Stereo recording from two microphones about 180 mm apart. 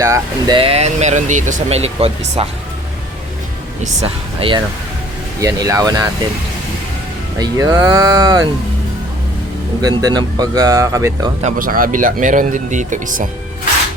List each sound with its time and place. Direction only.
0.0 s speech: 20° right (ahead or behind)
4.0 s speech: 30° right (ahead or behind)
7.3 s speech: 20° right (ahead or behind)
9.8 s speech: 20° right (ahead or behind)
11.4 s speech: 50° right (ahead or behind)